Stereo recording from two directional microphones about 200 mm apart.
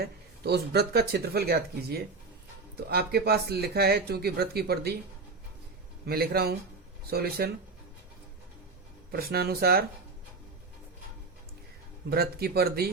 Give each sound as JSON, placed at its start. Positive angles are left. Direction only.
{"t": 0.0, "sound": "speech", "side_deg": -55}
{"t": 6.1, "sound": "speech", "side_deg": -50}
{"t": 9.1, "sound": "speech", "side_deg": -50}
{"t": 12.0, "sound": "speech", "side_deg": -50}